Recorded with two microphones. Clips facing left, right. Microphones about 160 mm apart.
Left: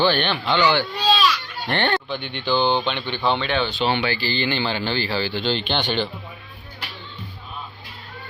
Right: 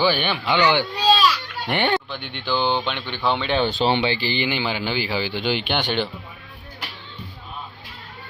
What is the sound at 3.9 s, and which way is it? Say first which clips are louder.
Speech: right 1 dB; 25° right (ahead or behind).